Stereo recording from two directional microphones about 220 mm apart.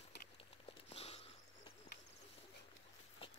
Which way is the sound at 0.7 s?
25° left (ahead or behind).